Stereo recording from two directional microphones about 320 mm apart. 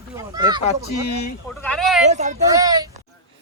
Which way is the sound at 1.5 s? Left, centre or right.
Centre.